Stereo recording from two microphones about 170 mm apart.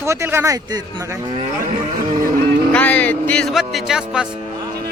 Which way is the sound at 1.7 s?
50° right (ahead or behind).